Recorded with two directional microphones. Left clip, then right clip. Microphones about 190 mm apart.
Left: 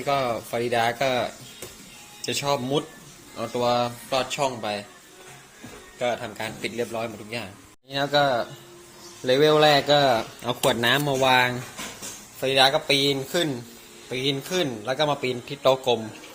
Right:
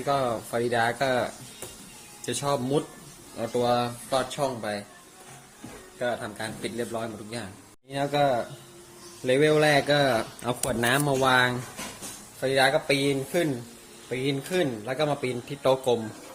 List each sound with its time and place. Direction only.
0.0 s speech: 10° right (ahead or behind)
6.0 s a man's voice: 5° right (ahead or behind)